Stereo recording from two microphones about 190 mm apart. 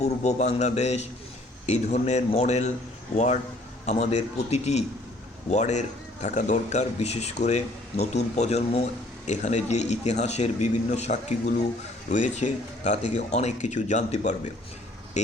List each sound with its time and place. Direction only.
0.0 s speech: 35° left (ahead or behind)
3.8 s speech: 35° left (ahead or behind)